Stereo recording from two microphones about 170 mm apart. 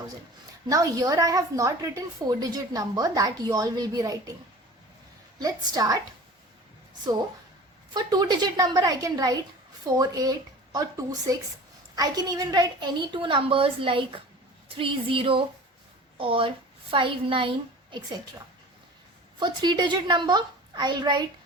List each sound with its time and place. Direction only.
0.7 s a woman's voice: 20° right (ahead or behind)
5.4 s a woman's voice: 20° right (ahead or behind)
7.9 s a woman's voice: 25° right (ahead or behind)
19.4 s a woman's voice: 25° right (ahead or behind)